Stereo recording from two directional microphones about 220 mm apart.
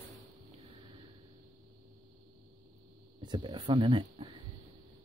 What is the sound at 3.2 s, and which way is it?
Speech, 20° right (ahead or behind).